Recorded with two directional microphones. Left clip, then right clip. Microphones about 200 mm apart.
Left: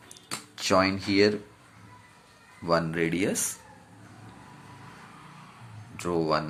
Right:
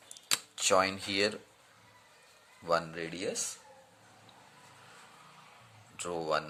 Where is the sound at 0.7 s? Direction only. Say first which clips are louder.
Left 5 dB; 30° right (ahead or behind).